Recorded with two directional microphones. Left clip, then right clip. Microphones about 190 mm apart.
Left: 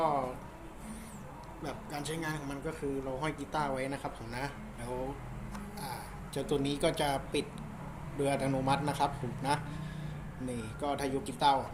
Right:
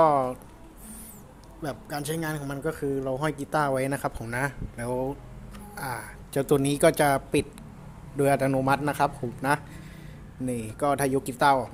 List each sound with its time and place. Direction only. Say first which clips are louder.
0.0 s speech: right 10 dB; 65° right (ahead or behind)
1.6 s a man's voice: right 7 dB; 60° right (ahead or behind)